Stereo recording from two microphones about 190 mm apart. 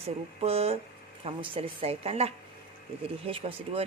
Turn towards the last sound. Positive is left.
turn(degrees=-30)  # may be behind; listen again after turning